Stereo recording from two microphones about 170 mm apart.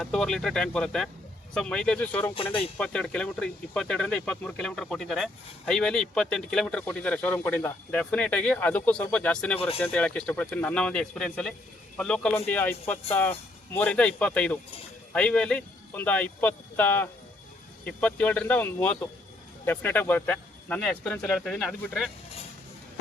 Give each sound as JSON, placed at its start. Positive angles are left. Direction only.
{"t": 0.0, "sound": "speech", "side_deg": 5}
{"t": 2.3, "sound": "speech", "side_deg": 30}
{"t": 2.6, "sound": "speech", "side_deg": 5}
{"t": 9.6, "sound": "speech", "side_deg": 35}
{"t": 9.8, "sound": "speech", "side_deg": 10}